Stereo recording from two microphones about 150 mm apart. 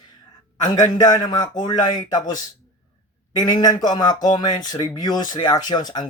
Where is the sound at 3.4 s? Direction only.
25° left (ahead or behind).